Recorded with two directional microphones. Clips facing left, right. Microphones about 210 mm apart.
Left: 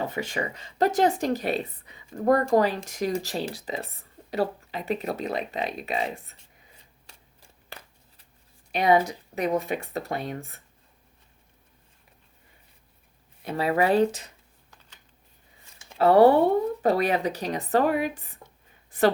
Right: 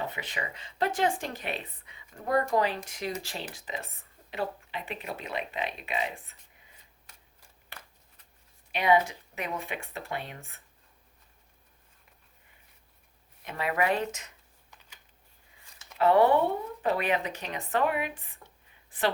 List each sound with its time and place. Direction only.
0.1 s speech: 45° left (ahead or behind)
7.1 s shuffling cards: 30° left (ahead or behind)
8.7 s speech: 40° left (ahead or behind)
13.4 s speech: 35° left (ahead or behind)
15.8 s speech: 35° left (ahead or behind)
18.9 s a sound: 45° left (ahead or behind)